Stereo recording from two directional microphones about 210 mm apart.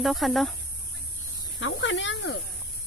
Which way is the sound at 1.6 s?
65° left (ahead or behind).